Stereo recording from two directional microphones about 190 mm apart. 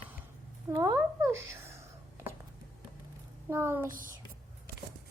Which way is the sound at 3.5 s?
10° right (ahead or behind).